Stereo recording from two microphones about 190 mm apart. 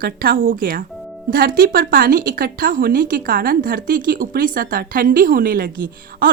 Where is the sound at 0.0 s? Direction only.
50° right (ahead or behind).